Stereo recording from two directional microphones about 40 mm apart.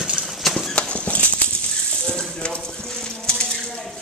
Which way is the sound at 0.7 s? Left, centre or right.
Left.